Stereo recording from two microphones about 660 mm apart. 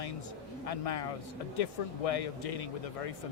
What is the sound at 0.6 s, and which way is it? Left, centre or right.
Speech, left.